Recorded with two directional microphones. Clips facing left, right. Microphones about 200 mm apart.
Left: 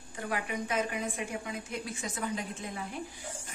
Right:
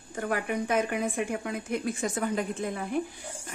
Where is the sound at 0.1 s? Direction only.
50° right (ahead or behind).